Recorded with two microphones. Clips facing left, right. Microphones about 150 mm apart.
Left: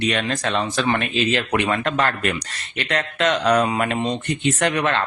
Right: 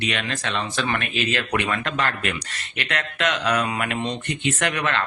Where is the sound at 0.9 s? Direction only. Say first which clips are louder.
Left 4 dB; 30° left (ahead or behind).